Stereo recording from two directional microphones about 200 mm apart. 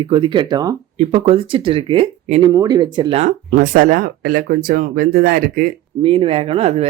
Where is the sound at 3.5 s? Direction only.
45° right (ahead or behind).